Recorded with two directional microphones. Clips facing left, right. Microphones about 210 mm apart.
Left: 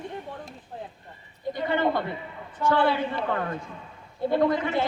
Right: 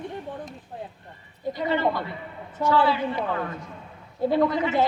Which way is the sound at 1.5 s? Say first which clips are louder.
Even; 55° left (ahead or behind).